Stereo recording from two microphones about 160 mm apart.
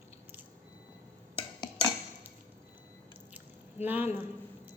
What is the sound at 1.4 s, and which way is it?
Cutlery, 30° left (ahead or behind).